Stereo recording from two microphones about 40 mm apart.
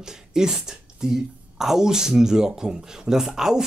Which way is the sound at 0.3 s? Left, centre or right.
Centre.